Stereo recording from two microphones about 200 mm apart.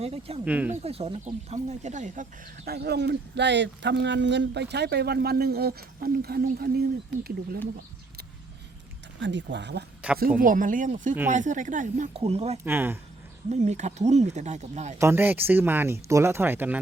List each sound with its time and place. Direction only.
0.0 s speech: 30° right (ahead or behind)
0.4 s speech: 10° right (ahead or behind)
0.7 s speech: 30° right (ahead or behind)
2.6 s speech: 55° right (ahead or behind)
9.2 s speech: 65° right (ahead or behind)
10.0 s speech: 5° right (ahead or behind)
10.4 s speech: 40° right (ahead or behind)
12.6 s speech: 10° right (ahead or behind)
13.5 s speech: 35° right (ahead or behind)
14.9 s speech: 15° right (ahead or behind)